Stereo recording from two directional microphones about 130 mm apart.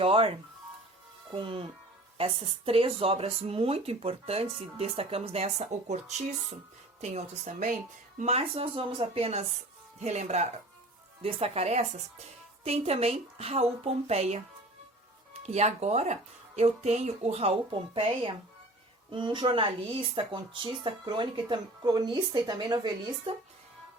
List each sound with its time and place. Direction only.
0.0 s speech: 45° right (ahead or behind)
1.4 s speech: 45° right (ahead or behind); by 7.7 s 60° right (ahead or behind)
8.2 s speech: 50° right (ahead or behind)
11.2 s speech: 50° right (ahead or behind)
17.7 s speech: 40° right (ahead or behind)